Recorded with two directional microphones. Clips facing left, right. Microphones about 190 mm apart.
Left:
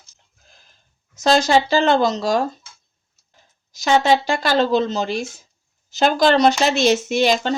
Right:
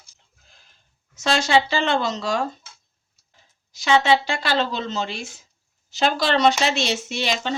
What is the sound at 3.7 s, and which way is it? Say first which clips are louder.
Speech: left 2 dB; 40° left (ahead or behind).